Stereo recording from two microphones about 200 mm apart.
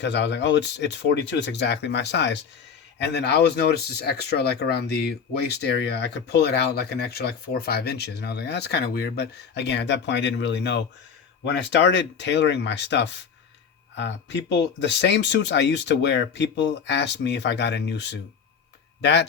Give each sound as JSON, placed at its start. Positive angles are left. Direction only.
{"t": 0.0, "sound": "speech", "side_deg": 60}